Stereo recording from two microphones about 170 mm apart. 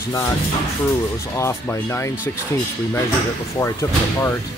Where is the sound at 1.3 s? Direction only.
15° left (ahead or behind).